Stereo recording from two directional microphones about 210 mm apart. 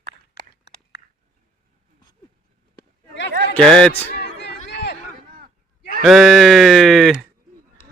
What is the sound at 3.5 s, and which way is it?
Speech, 5° left (ahead or behind).